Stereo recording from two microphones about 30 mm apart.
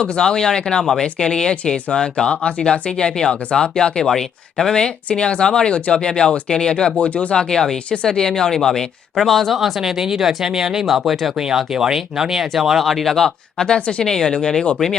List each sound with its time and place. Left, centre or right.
0.0 s speech: left
3.0 s speech: left
5.7 s speech: left
7.3 s speech: centre
10.8 s speech: centre
11.5 s speech: centre
13.1 s speech: centre
13.7 s speech: left
14.0 s speech: centre